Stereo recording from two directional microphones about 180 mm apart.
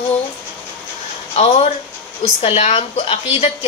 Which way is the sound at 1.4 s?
35° left (ahead or behind).